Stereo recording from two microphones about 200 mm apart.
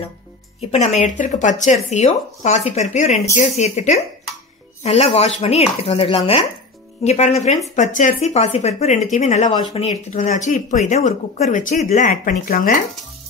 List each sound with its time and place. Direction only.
0.6 s speech: 30° left (ahead or behind)